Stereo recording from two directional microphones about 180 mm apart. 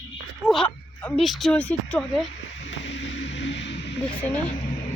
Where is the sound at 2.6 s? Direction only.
80° left.